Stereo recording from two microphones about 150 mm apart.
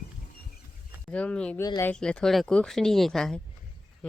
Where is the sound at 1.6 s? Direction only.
25° left (ahead or behind).